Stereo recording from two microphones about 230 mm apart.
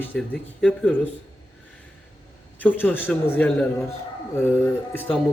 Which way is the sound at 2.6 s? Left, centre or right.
Centre.